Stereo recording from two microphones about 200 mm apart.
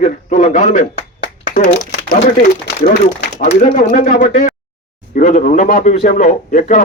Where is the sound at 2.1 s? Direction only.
40° left (ahead or behind).